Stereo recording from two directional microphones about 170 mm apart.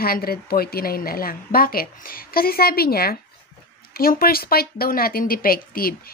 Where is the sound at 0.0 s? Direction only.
60° left (ahead or behind).